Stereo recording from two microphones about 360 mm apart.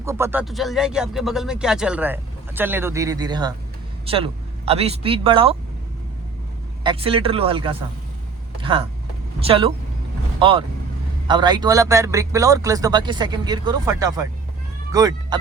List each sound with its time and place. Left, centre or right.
0.0 s a man's voice: centre
6.8 s a man's voice: centre